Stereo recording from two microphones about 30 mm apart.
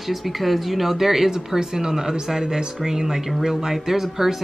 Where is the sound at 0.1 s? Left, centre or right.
Centre.